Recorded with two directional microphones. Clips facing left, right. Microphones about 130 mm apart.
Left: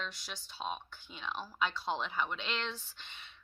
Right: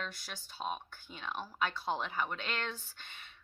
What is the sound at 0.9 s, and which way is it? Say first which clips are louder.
Speech: even; 45° right (ahead or behind).